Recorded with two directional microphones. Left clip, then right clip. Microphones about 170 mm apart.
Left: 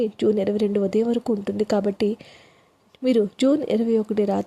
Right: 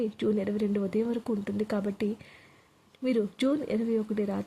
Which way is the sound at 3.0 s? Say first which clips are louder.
Left 8 dB; 25° left (ahead or behind).